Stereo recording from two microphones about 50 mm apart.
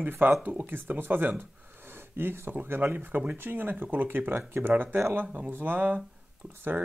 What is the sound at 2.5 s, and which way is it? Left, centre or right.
Speech, right.